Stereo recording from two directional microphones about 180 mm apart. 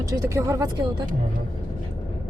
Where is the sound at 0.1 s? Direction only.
15° right (ahead or behind).